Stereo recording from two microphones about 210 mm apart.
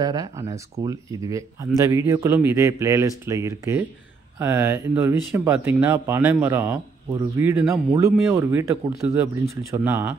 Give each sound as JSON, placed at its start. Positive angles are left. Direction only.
{"t": 0.0, "sound": "speech", "side_deg": -20}